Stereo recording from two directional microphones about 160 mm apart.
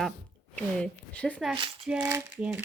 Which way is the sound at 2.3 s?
10° right (ahead or behind).